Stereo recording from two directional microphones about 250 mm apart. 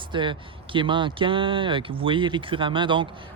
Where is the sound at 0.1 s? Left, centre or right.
Centre.